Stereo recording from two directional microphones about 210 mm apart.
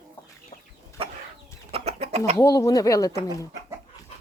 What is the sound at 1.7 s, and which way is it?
Chicken, 30° right (ahead or behind).